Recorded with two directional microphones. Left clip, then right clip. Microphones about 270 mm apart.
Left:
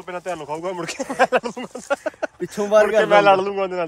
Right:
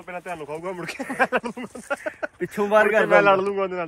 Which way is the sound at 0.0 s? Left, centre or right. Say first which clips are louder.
Left 4 dB; left.